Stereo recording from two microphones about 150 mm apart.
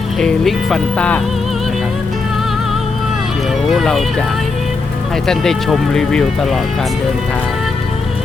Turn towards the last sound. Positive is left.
turn(degrees=0)  # may be behind; listen again after turning